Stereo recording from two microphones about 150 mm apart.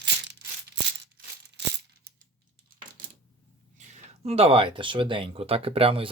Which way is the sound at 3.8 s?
50° right (ahead or behind).